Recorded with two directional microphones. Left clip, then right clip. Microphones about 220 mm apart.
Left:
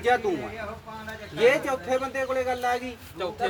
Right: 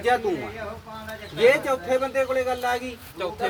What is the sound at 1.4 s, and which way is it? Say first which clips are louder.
Speech: right 3 dB; 15° left (ahead or behind).